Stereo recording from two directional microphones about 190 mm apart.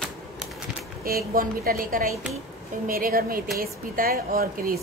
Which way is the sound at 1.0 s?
50° right (ahead or behind).